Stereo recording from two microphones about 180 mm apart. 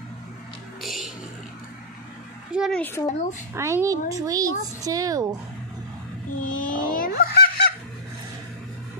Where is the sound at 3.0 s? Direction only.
40° left (ahead or behind).